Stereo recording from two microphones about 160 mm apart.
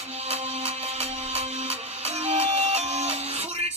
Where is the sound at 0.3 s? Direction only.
40° right (ahead or behind).